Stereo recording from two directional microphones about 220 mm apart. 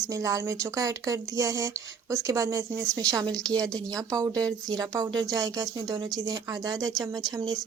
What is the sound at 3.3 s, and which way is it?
Speech, 5° left (ahead or behind).